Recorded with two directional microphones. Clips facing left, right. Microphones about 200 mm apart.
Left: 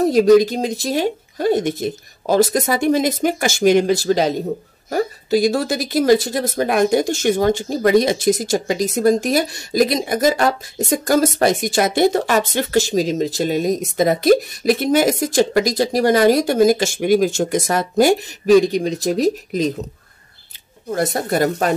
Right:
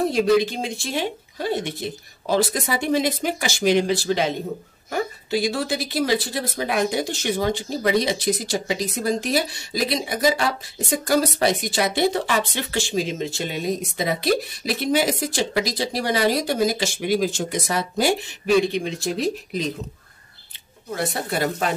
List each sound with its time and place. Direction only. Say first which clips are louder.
0.0 s speech: left 7 dB; 40° left (ahead or behind)
20.9 s speech: left 6 dB; 45° left (ahead or behind)